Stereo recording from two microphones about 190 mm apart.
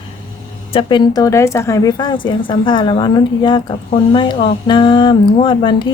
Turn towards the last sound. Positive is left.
turn(degrees=25)  # may be behind; listen again after turning